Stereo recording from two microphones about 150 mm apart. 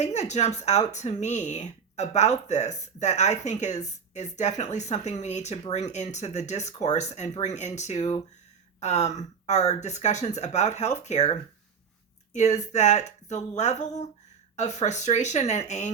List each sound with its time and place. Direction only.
0.0 s speech: 50° left (ahead or behind)